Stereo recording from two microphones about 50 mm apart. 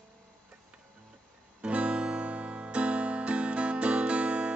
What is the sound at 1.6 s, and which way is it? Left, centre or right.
Guitar, right.